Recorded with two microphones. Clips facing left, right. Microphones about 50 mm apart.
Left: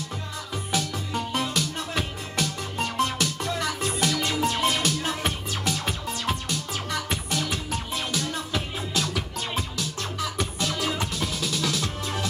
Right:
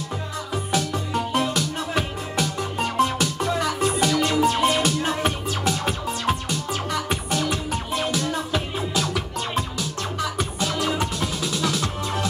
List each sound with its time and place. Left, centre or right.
0.7 s music: centre